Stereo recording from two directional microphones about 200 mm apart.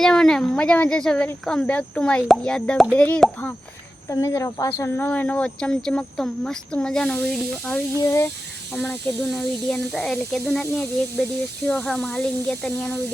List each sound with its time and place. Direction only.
0.0 s speech: 5° left (ahead or behind)